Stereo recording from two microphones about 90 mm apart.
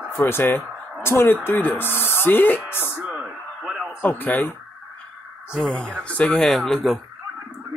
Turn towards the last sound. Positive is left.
turn(degrees=5)  # may be behind; listen again after turning